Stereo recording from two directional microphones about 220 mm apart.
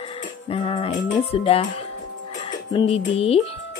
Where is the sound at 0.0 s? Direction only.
25° left (ahead or behind).